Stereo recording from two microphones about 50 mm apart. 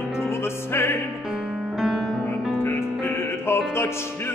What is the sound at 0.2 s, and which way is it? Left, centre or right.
Music, left.